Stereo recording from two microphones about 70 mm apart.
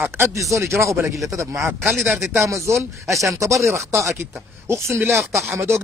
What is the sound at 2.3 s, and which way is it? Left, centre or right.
Speech, right.